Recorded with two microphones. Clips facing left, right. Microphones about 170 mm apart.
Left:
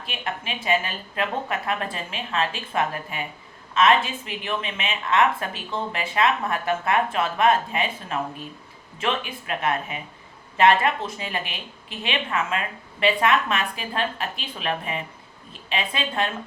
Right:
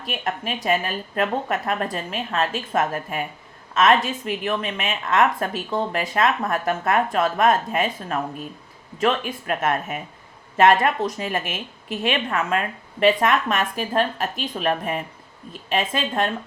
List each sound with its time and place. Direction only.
0.0 s a woman's voice: 40° right (ahead or behind)